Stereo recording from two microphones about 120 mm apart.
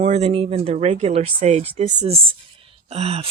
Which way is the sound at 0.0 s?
65° right (ahead or behind).